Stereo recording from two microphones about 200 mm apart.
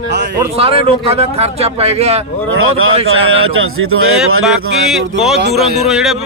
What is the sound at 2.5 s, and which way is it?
Speech, 90° right.